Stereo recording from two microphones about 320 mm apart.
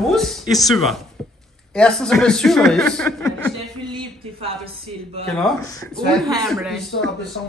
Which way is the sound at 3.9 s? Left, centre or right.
Centre.